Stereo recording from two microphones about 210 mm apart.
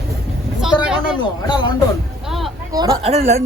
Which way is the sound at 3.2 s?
40° right (ahead or behind).